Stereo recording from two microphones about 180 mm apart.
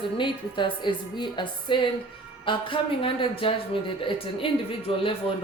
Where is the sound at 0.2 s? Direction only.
25° left (ahead or behind).